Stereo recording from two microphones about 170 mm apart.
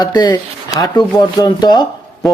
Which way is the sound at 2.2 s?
Centre (ahead or behind).